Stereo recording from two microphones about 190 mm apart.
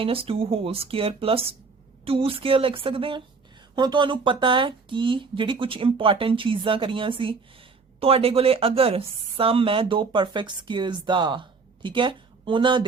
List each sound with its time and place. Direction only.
0.0 s speech: 30° right (ahead or behind)